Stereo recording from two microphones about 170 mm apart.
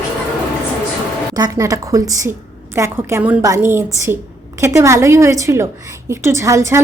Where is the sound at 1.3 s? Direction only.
20° right (ahead or behind).